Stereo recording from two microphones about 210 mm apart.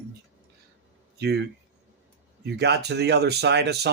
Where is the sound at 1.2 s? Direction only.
50° right (ahead or behind).